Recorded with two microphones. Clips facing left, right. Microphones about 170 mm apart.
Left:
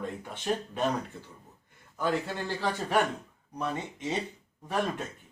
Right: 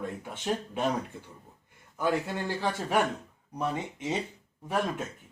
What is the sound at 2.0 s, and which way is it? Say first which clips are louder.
Speech: right 1 dB; 15° right (ahead or behind).